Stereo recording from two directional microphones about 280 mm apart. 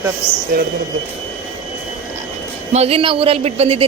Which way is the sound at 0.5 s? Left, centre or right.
Right.